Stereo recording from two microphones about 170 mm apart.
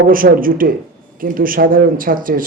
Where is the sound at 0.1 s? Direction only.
55° right (ahead or behind).